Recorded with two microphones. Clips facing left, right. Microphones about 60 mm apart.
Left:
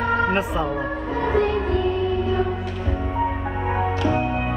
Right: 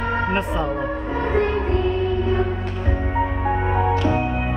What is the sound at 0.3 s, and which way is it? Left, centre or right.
Speech, centre.